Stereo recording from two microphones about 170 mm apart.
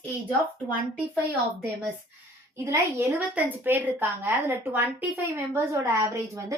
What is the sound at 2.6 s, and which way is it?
A woman's voice, 15° right (ahead or behind).